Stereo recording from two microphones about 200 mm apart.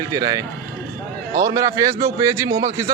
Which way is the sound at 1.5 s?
15° right (ahead or behind).